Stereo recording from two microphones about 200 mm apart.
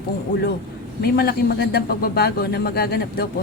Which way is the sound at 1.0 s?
50° left (ahead or behind).